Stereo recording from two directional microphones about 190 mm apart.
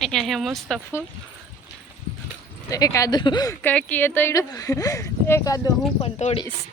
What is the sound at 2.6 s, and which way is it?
Speech, 20° left (ahead or behind).